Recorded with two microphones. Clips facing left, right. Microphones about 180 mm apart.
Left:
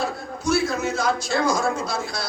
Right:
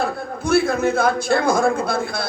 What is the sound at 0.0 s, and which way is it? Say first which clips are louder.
A man's voice: right 2 dB; 55° right (ahead or behind).